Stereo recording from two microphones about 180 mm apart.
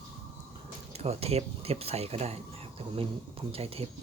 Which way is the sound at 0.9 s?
35° right (ahead or behind).